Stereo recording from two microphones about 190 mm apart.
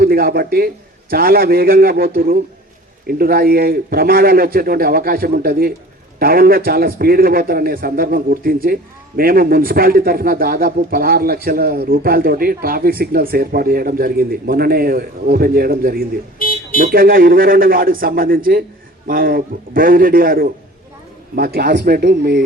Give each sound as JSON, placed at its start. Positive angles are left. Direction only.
{"t": 0.0, "sound": "a man's voice", "side_deg": -50}
{"t": 16.4, "sound": "speech", "side_deg": 50}
{"t": 16.8, "sound": "a man's voice", "side_deg": -50}